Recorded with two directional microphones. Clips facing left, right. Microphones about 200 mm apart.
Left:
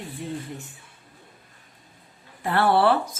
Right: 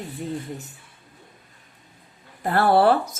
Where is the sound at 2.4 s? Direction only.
40° right (ahead or behind).